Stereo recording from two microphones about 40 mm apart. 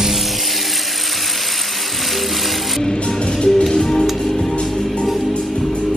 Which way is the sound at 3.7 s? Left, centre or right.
Centre.